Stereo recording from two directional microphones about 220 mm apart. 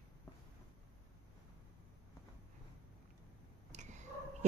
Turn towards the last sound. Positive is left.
turn(degrees=-30)  # may be behind; listen again after turning